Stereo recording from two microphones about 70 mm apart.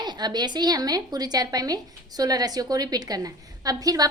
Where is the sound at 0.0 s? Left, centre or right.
Right.